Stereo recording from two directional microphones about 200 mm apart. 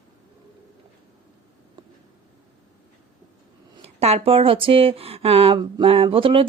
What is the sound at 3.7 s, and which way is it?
Speech, 30° right (ahead or behind).